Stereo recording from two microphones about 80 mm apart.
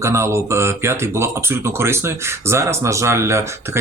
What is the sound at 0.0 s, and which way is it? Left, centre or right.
Speech, right.